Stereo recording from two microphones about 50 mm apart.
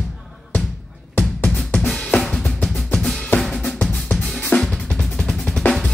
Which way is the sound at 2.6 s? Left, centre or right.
Centre.